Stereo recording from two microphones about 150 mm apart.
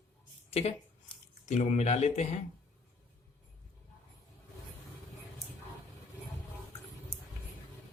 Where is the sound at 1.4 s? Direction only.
55° left (ahead or behind).